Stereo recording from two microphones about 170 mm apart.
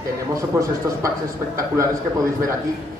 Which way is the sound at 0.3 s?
20° right (ahead or behind).